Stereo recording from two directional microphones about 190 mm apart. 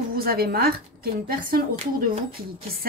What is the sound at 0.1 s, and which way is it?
A woman's voice, 50° right (ahead or behind).